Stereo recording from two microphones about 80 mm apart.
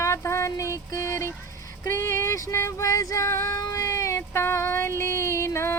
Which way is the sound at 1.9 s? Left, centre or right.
Left.